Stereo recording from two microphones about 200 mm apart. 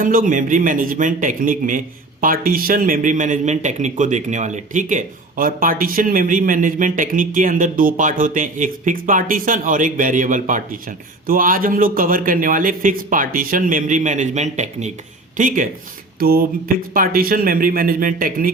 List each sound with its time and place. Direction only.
0.0 s a man's voice: 45° right (ahead or behind)